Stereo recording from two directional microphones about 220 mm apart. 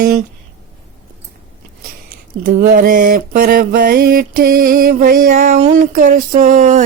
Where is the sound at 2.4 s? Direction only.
40° right (ahead or behind).